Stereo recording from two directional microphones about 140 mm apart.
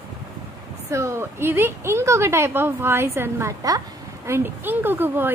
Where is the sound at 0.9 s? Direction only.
20° right (ahead or behind).